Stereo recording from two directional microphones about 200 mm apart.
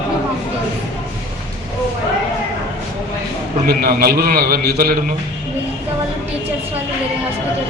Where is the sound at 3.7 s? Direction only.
50° right (ahead or behind).